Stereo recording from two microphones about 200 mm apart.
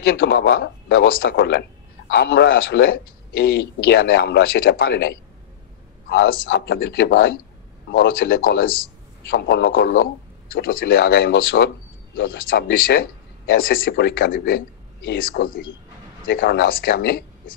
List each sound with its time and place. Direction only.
0.2 s a man's voice: 60° left (ahead or behind)
9.3 s a man's voice: 65° left (ahead or behind)
10.5 s a man's voice: 45° left (ahead or behind)